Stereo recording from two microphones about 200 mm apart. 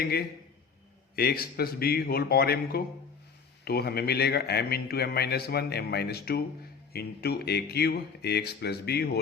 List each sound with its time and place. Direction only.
0.0 s a man's voice: 50° left (ahead or behind)